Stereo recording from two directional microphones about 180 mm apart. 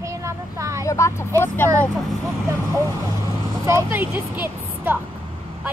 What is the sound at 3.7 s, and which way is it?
Speech, 15° right (ahead or behind).